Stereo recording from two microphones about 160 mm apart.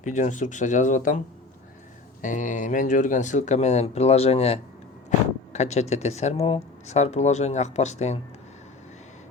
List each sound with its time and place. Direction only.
0.0 s speech: 50° left (ahead or behind)
2.2 s speech: 55° left (ahead or behind)